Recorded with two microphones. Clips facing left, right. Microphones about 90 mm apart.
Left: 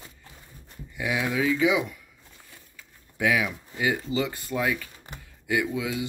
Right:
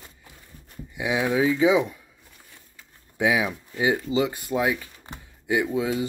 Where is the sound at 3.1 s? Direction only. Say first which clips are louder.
Right 2 dB; 20° right (ahead or behind).